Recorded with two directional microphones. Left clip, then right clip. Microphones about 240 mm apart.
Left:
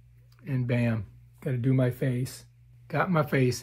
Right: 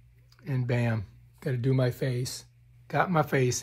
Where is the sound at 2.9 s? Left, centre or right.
Right.